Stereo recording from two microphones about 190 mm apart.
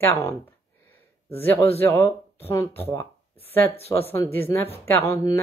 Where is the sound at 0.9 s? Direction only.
10° left (ahead or behind).